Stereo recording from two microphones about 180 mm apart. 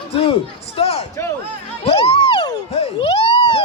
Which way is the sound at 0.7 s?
35° left (ahead or behind).